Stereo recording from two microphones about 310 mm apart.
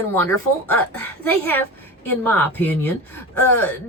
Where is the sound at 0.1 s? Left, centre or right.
Centre.